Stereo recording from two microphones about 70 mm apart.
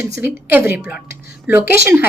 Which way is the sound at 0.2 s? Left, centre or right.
Right.